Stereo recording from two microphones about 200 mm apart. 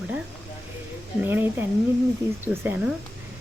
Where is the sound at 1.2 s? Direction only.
10° right (ahead or behind).